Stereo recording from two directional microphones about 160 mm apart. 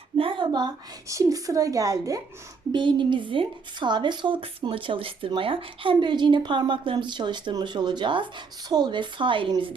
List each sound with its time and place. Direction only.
0.2 s a woman's voice: 30° right (ahead or behind)